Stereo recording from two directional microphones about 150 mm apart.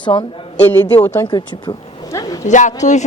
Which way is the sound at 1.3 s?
30° left (ahead or behind).